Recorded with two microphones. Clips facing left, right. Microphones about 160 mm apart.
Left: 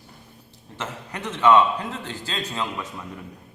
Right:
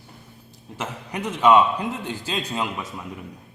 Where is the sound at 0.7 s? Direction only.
10° right (ahead or behind).